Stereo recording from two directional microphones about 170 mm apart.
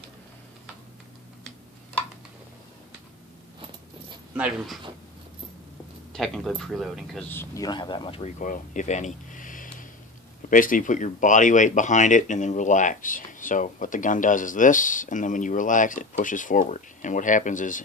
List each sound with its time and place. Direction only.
4.4 s speech: 5° right (ahead or behind)
6.1 s speech: 5° left (ahead or behind)
7.2 s speech: 15° left (ahead or behind)
8.2 s speech: 50° left (ahead or behind)